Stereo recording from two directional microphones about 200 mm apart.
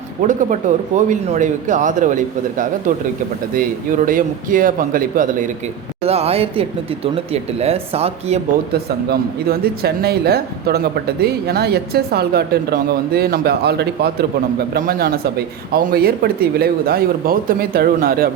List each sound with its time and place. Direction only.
0.3 s speech: 40° right (ahead or behind)
6.1 s speech: 30° right (ahead or behind)
8.7 s speech: 50° right (ahead or behind)